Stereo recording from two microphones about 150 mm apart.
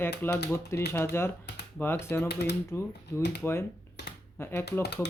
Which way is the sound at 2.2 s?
90° left.